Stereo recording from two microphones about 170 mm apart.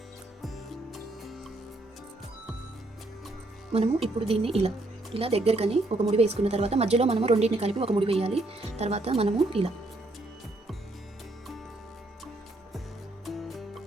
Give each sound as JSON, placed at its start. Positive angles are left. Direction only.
{"t": 0.4, "sound": "music", "side_deg": 0}
{"t": 3.7, "sound": "a woman's voice", "side_deg": -35}
{"t": 13.2, "sound": "music", "side_deg": 0}